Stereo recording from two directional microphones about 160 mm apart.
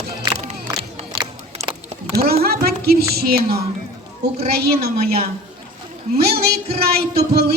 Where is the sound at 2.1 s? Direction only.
75° right (ahead or behind).